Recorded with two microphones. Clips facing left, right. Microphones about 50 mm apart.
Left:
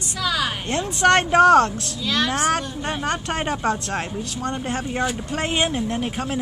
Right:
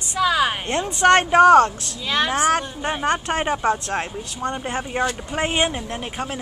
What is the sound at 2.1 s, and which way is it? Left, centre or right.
Speech, centre.